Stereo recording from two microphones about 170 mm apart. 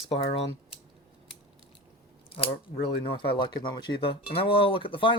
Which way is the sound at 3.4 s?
25° left (ahead or behind).